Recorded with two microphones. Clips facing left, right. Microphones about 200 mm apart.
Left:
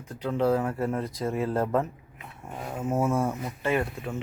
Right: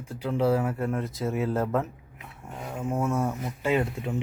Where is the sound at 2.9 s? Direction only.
Centre (ahead or behind).